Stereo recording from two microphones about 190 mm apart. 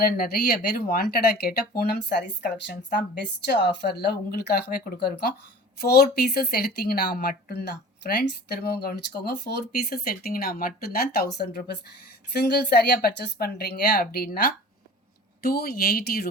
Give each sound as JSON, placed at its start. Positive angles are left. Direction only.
{"t": 0.0, "sound": "speech", "side_deg": 55}